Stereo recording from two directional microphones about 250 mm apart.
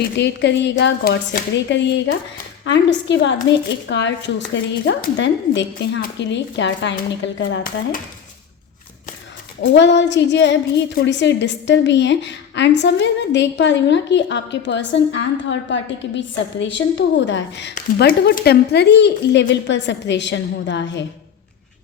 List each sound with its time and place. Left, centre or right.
0.2 s a woman's voice: left
9.6 s a woman's voice: left